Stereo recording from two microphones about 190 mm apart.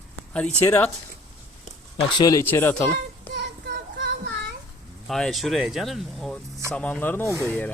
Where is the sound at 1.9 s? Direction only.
20° left (ahead or behind).